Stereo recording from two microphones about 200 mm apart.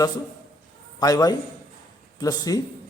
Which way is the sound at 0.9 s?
20° left (ahead or behind).